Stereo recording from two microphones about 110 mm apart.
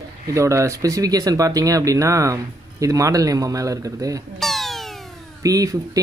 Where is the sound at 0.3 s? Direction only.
30° right (ahead or behind).